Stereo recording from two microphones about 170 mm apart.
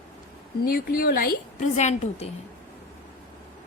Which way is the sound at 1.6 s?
40° left (ahead or behind).